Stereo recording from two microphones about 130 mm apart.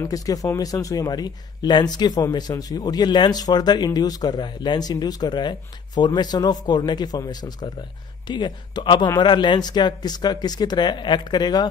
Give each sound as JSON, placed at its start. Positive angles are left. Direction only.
{"t": 0.0, "sound": "speech", "side_deg": 25}